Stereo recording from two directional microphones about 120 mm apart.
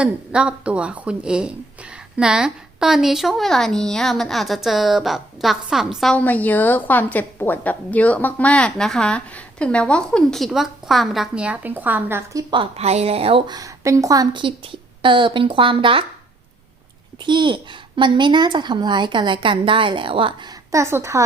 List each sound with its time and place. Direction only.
0.0 s a woman's voice: 10° right (ahead or behind)
6.1 s a woman's voice: 15° left (ahead or behind); by 12.5 s 25° right (ahead or behind)
12.7 s a woman's voice: 60° right (ahead or behind)
13.5 s a woman's voice: 25° right (ahead or behind); by 16.0 s 45° right (ahead or behind)
17.2 s a child's voice: 40° right (ahead or behind)
20.7 s speech: 25° right (ahead or behind)